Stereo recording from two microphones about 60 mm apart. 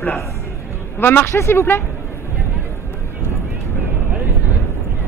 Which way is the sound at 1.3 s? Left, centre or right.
Left.